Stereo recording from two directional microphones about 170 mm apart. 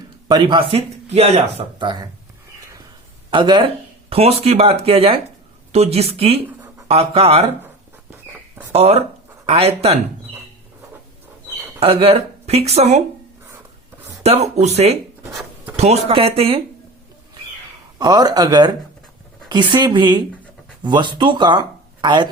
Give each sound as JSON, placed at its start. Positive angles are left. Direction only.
{"t": 0.3, "sound": "speech", "side_deg": -25}
{"t": 3.2, "sound": "speech", "side_deg": -25}
{"t": 8.7, "sound": "speech", "side_deg": -35}
{"t": 11.8, "sound": "speech", "side_deg": -35}
{"t": 14.3, "sound": "speech", "side_deg": -40}
{"t": 17.9, "sound": "speech", "side_deg": -20}